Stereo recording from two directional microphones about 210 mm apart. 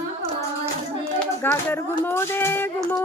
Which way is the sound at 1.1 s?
10° left (ahead or behind).